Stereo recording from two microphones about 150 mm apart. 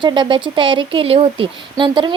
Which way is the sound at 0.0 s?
30° right (ahead or behind).